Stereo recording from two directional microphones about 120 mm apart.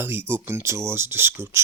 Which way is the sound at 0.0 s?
20° right (ahead or behind).